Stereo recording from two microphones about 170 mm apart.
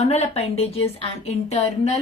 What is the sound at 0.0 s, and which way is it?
A woman's voice, 40° left (ahead or behind).